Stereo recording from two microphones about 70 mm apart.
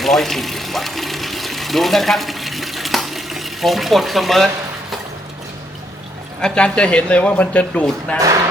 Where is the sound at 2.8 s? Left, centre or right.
Centre.